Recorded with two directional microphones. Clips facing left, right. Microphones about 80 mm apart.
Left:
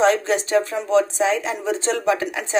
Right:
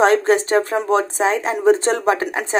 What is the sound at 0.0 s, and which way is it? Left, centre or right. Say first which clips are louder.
Speech: right 4 dB; right.